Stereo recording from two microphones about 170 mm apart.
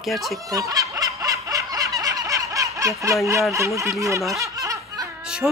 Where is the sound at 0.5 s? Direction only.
20° right (ahead or behind).